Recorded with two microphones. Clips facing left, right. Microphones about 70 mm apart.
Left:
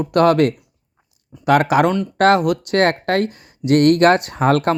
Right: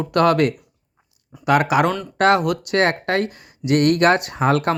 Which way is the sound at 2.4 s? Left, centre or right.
Left.